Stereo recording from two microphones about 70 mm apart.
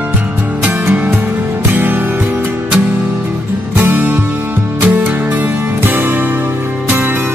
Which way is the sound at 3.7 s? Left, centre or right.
Right.